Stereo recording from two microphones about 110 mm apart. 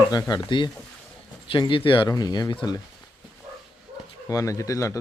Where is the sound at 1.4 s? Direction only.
50° left (ahead or behind).